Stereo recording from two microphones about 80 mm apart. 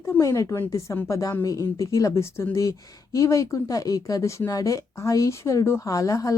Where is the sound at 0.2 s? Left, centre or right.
Left.